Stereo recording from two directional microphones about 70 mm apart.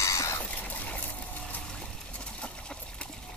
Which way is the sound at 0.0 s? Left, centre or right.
Left.